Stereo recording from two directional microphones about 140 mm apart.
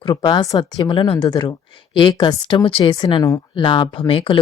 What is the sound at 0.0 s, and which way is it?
A woman's voice, 30° left (ahead or behind).